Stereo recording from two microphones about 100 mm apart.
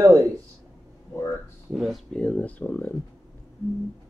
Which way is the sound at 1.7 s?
Centre (ahead or behind).